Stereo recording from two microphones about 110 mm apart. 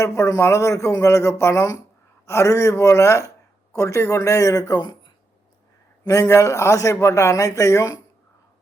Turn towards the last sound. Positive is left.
turn(degrees=30)  # may be behind; listen again after turning